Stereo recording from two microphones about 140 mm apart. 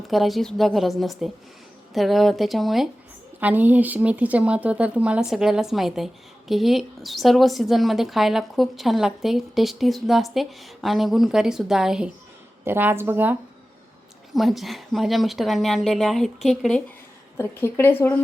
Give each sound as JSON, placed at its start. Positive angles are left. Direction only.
{"t": 0.1, "sound": "a woman's voice", "side_deg": 0}
{"t": 3.4, "sound": "a woman's voice", "side_deg": -10}
{"t": 12.6, "sound": "speech", "side_deg": -15}
{"t": 14.3, "sound": "a woman's voice", "side_deg": 0}
{"t": 17.3, "sound": "speech", "side_deg": 15}